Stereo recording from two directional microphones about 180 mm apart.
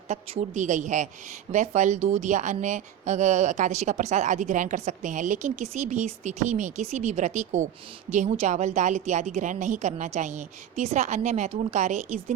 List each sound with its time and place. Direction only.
0.1 s a woman's voice: 35° right (ahead or behind)